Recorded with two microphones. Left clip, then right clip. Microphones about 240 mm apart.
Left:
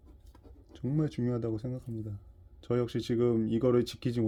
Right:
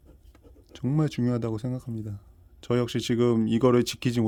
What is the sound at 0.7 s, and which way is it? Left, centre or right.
Speech, right.